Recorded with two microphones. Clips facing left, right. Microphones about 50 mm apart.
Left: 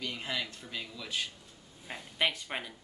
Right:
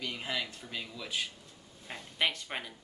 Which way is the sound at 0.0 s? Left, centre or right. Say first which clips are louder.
Even; centre.